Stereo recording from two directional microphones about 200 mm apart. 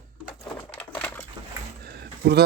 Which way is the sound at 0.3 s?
10° left (ahead or behind).